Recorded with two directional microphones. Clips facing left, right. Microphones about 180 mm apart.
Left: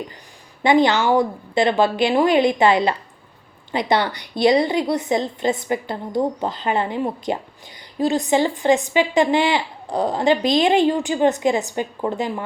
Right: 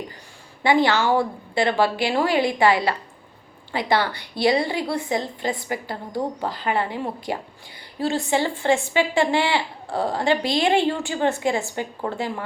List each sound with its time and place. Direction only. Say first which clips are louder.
0.6 s speech: left 3 dB; 20° left (ahead or behind)